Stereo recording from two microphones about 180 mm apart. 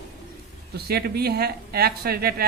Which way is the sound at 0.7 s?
60° right (ahead or behind).